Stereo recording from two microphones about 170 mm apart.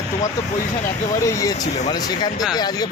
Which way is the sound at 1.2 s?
20° left (ahead or behind).